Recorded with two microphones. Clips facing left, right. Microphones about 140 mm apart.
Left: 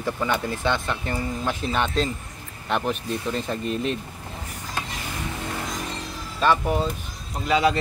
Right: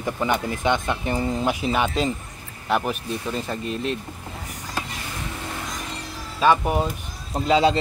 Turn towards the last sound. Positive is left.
turn(degrees=-25)  # may be behind; listen again after turning